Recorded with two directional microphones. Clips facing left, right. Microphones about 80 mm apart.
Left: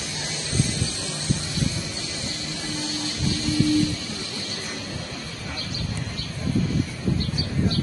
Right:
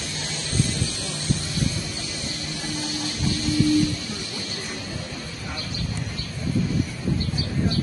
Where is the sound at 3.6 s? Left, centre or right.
Left.